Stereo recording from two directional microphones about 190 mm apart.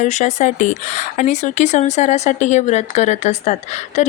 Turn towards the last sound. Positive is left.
turn(degrees=35)  # may be behind; listen again after turning